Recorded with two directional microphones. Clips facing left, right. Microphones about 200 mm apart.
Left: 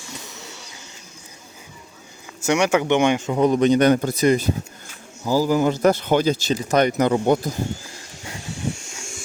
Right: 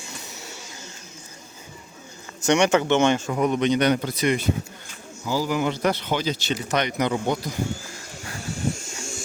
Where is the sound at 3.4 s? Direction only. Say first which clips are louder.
Left 6 dB; 40° left (ahead or behind).